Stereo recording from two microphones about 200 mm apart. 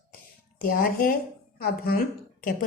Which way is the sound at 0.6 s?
45° left (ahead or behind).